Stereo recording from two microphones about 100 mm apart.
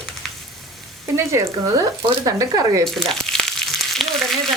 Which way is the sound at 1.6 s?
40° right (ahead or behind).